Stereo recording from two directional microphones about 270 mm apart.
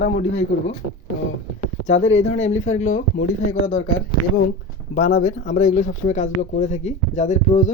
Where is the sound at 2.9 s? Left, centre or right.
Left.